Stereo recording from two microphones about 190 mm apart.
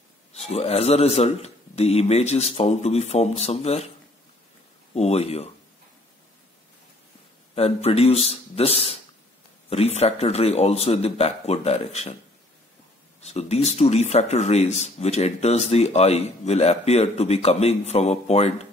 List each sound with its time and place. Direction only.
0.5 s speech: 30° left (ahead or behind)
4.9 s speech: 35° left (ahead or behind)
7.5 s speech: 30° left (ahead or behind)
13.2 s speech: 35° left (ahead or behind)